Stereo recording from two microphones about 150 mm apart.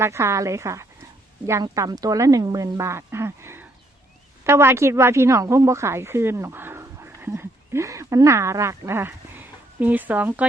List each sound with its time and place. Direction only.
0.0 s a woman's voice: 20° right (ahead or behind)